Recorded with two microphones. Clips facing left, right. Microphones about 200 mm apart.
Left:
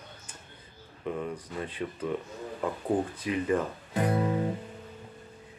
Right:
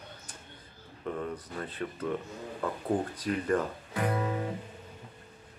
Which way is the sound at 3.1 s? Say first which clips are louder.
Left 1 dB; 5° left (ahead or behind).